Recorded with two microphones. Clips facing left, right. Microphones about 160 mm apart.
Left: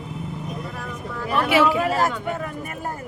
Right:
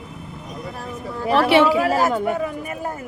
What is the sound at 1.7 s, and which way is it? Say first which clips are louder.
Speech: right 3 dB; 10° right (ahead or behind).